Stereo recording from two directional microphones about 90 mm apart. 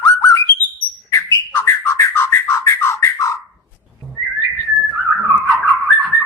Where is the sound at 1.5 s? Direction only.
30° left (ahead or behind).